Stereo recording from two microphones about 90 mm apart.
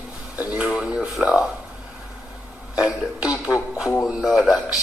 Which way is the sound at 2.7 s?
10° right (ahead or behind).